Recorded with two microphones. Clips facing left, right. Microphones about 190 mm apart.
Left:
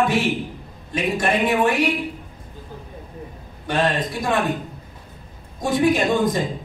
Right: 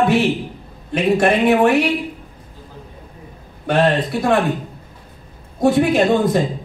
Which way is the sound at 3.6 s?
60° right (ahead or behind).